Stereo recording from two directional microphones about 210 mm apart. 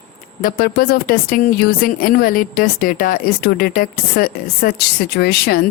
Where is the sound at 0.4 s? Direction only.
45° left (ahead or behind).